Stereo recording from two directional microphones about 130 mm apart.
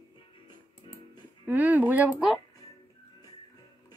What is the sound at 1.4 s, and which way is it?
Speech, 15° right (ahead or behind).